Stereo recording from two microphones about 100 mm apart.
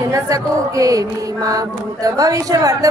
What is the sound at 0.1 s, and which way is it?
Speech, 35° right (ahead or behind).